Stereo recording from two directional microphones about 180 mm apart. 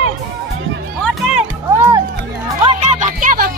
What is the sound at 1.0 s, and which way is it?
Music, centre (ahead or behind).